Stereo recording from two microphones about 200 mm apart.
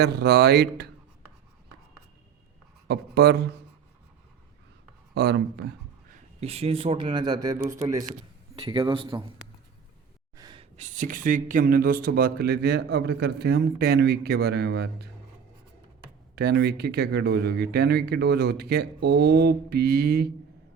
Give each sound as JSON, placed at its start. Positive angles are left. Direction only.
{"t": 0.0, "sound": "speech", "side_deg": -55}
{"t": 2.8, "sound": "speech", "side_deg": -55}
{"t": 5.1, "sound": "speech", "side_deg": -55}
{"t": 6.4, "sound": "speech", "side_deg": -30}
{"t": 10.3, "sound": "snort", "side_deg": -20}
{"t": 10.8, "sound": "speech", "side_deg": -40}
{"t": 16.3, "sound": "speech", "side_deg": -55}